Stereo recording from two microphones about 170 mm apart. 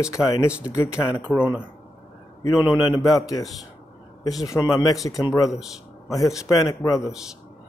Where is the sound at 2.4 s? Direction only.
20° left (ahead or behind).